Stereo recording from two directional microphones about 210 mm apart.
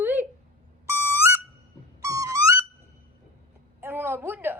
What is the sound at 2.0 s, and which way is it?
Owl, 15° right (ahead or behind).